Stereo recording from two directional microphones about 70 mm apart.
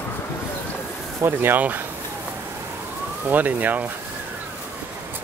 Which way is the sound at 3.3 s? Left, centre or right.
Right.